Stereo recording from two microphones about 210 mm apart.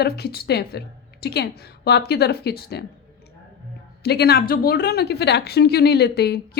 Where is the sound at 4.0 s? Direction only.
50° left (ahead or behind).